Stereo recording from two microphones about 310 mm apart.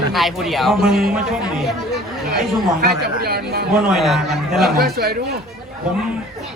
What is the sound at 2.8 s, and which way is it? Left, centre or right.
Speech, right.